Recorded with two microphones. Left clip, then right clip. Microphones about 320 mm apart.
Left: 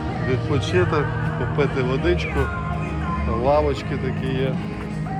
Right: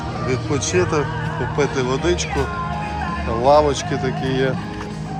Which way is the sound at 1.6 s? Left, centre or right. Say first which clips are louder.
Right 2 dB; centre.